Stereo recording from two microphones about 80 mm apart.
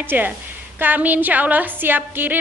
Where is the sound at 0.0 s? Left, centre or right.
Right.